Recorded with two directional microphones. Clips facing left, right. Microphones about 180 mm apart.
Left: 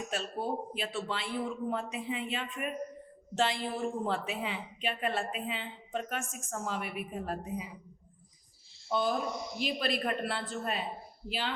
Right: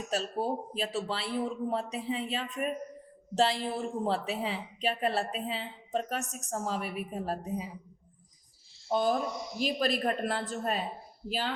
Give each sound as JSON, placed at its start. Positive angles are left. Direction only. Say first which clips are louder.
{"t": 0.1, "sound": "a woman's voice", "louder": "right 5 dB", "side_deg": -40}
{"t": 8.9, "sound": "a woman's voice", "louder": "right 3 dB", "side_deg": -45}